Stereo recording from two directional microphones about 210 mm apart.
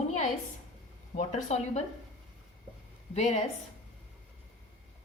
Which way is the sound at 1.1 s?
30° left (ahead or behind).